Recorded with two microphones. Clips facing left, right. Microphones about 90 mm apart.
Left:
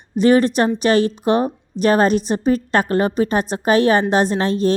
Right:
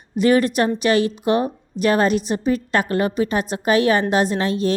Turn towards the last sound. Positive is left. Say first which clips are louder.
# left 2 dB
turn(degrees=35)  # may be behind; listen again after turning